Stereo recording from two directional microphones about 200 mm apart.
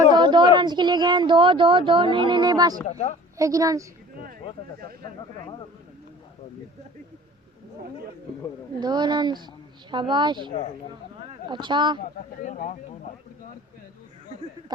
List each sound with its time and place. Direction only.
0.2 s speech: 20° right (ahead or behind)
2.8 s speech: 35° left (ahead or behind)
3.3 s a woman's voice: 15° right (ahead or behind)
8.8 s speech: 20° right (ahead or behind)
12.4 s speech: 40° left (ahead or behind)